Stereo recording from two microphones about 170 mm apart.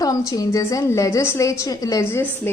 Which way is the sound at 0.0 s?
20° left (ahead or behind).